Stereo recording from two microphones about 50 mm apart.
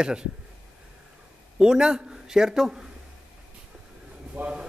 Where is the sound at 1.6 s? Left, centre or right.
Centre.